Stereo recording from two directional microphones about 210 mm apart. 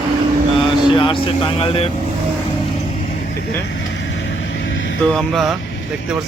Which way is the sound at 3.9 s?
60° left (ahead or behind).